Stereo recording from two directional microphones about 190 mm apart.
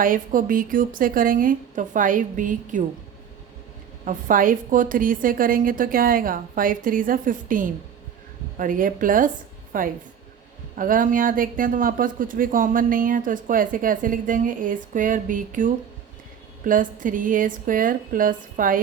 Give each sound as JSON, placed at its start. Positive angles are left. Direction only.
{"t": 0.0, "sound": "speech", "side_deg": -45}
{"t": 4.0, "sound": "speech", "side_deg": -45}